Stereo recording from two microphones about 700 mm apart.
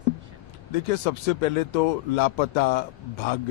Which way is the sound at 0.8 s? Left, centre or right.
Left.